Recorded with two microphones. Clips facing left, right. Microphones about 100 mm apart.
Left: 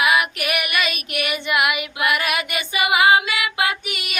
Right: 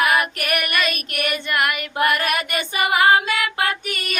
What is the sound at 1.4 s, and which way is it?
Child singing, 5° left (ahead or behind).